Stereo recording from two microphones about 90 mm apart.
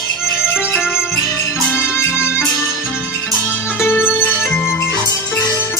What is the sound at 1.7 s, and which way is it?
Music, 25° left (ahead or behind).